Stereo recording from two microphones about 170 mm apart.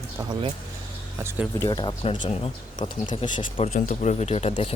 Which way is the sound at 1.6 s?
25° left (ahead or behind).